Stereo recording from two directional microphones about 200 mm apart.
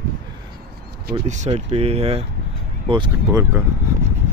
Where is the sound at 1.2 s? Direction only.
35° right (ahead or behind).